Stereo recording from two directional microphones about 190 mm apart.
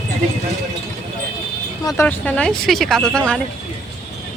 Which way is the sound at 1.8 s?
20° left (ahead or behind).